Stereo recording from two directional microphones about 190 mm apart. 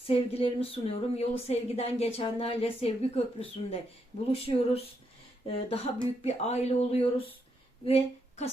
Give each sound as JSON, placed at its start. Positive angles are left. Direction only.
{"t": 0.1, "sound": "a woman's voice", "side_deg": 30}